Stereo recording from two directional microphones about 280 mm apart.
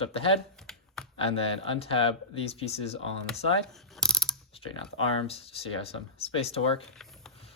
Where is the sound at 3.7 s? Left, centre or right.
Centre.